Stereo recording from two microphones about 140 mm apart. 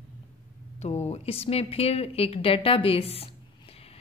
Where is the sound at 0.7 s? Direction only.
55° left (ahead or behind).